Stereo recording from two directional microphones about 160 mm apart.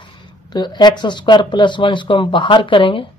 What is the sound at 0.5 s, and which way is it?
Speech, 25° left (ahead or behind).